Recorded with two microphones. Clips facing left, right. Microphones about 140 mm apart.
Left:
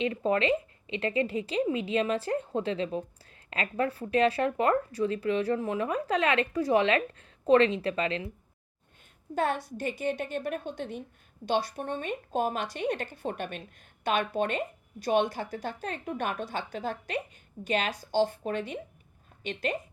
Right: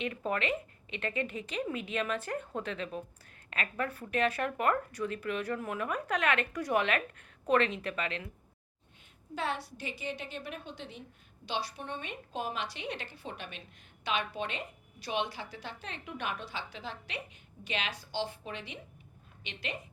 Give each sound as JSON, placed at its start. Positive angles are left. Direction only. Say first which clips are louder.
{"t": 0.0, "sound": "speech", "louder": "left 7 dB", "side_deg": 30}
{"t": 9.3, "sound": "a woman's voice", "louder": "left 7 dB", "side_deg": 50}